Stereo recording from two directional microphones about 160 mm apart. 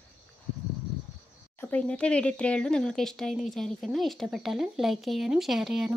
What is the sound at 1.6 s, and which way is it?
A woman's voice, 10° left (ahead or behind).